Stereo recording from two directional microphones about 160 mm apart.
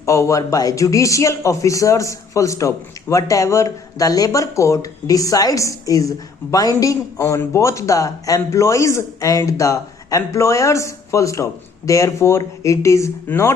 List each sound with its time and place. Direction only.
0.0 s speech: 20° left (ahead or behind)